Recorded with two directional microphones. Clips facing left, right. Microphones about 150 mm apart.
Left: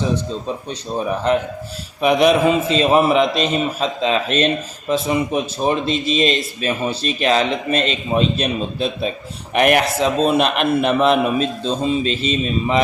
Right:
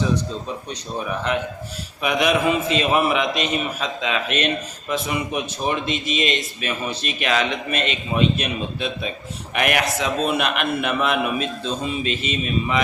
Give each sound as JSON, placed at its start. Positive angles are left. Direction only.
{"t": 0.4, "sound": "a man's voice", "side_deg": 30}